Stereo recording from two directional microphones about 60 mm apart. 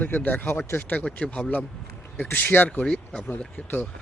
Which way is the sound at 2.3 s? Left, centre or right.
Left.